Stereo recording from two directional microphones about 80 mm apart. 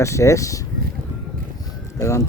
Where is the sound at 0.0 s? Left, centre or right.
Left.